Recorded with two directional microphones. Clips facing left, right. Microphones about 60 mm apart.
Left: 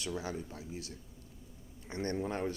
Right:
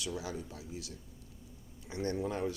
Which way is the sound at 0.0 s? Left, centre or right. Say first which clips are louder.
Left 1 dB; left.